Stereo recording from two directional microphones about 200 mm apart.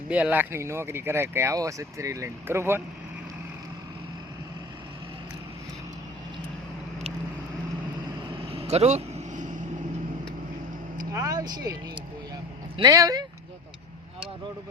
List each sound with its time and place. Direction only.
0.1 s speech: 5° right (ahead or behind)
8.4 s vehicle: 30° right (ahead or behind)
11.1 s speech: 15° right (ahead or behind)